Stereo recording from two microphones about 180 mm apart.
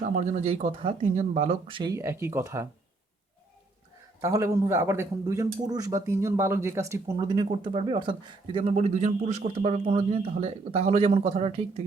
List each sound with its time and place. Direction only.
0.0 s speech: 40° right (ahead or behind); by 2.6 s 15° right (ahead or behind)
4.2 s speech: 15° right (ahead or behind); by 11.6 s 30° right (ahead or behind)